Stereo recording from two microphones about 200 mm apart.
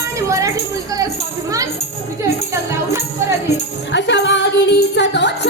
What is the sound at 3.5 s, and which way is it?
Music, 60° left (ahead or behind).